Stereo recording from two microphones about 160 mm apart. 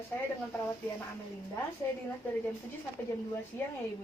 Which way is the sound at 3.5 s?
15° left (ahead or behind).